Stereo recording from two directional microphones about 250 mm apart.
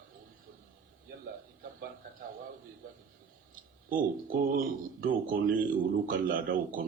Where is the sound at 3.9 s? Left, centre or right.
Right.